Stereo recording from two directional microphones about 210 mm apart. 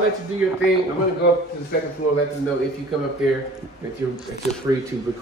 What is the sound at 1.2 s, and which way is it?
Speech, 50° left (ahead or behind).